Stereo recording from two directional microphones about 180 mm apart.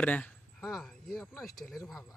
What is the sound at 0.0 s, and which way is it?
Speech, 5° left (ahead or behind).